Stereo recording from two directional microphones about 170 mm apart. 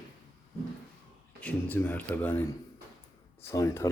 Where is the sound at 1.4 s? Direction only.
10° left (ahead or behind).